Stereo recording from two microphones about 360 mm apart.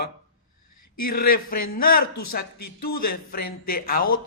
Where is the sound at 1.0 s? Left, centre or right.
Left.